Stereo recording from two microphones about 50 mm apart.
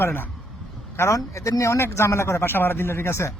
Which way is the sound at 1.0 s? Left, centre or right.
Left.